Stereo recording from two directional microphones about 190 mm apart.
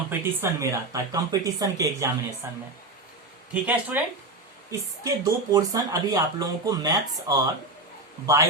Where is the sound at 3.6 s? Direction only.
10° right (ahead or behind).